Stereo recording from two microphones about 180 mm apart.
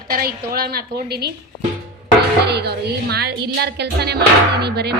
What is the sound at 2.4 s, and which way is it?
A woman's voice, 65° right (ahead or behind).